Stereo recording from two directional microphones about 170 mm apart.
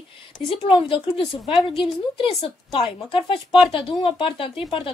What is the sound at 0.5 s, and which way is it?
Speech, 30° left (ahead or behind).